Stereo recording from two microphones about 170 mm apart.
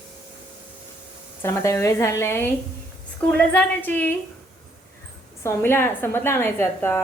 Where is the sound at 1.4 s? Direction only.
15° left (ahead or behind).